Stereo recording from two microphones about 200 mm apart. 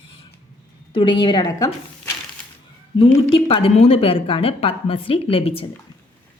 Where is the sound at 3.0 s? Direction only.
25° left (ahead or behind).